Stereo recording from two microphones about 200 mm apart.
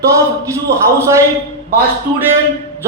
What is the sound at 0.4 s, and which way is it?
Speech, 15° right (ahead or behind).